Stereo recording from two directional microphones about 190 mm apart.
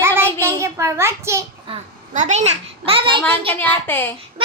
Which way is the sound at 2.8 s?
25° right (ahead or behind).